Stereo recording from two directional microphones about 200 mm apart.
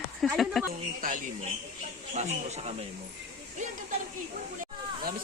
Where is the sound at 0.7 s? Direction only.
45° right (ahead or behind).